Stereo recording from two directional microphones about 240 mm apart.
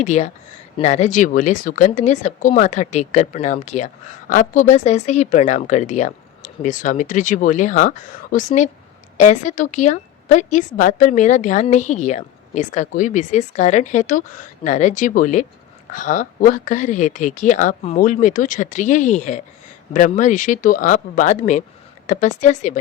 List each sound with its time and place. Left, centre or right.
0.0 s a woman's voice: left